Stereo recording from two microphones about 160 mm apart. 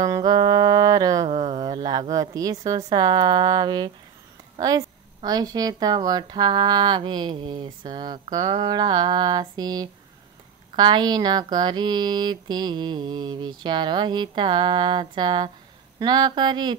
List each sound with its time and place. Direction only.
0.0 s mantra: 25° right (ahead or behind)
1.3 s speech: 30° right (ahead or behind)